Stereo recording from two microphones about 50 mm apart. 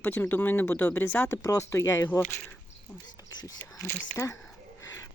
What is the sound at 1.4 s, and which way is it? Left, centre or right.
Speech, left.